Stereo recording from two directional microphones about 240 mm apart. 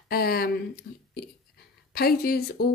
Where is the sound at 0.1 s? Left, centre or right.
Left.